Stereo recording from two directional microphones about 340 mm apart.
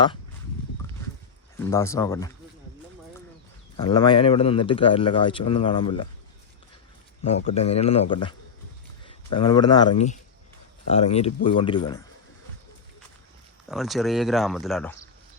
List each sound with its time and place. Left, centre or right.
1.5 s speech: centre
3.8 s speech: centre
7.5 s speech: centre
13.7 s speech: centre